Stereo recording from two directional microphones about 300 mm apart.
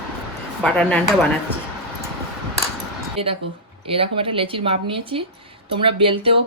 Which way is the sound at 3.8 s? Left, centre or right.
Centre.